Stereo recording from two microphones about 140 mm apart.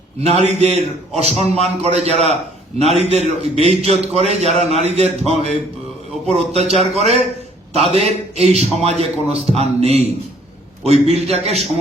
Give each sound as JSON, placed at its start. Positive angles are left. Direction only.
{"t": 0.2, "sound": "a man's voice", "side_deg": -50}